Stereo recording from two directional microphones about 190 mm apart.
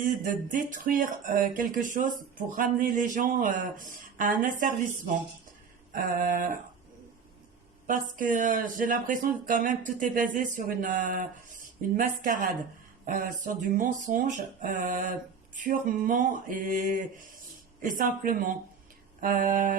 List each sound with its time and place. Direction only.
0.0 s speech: 45° right (ahead or behind)
7.9 s speech: 45° right (ahead or behind)